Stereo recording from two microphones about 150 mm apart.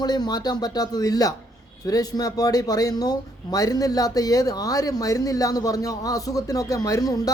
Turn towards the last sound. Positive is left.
turn(degrees=25)  # may be behind; listen again after turning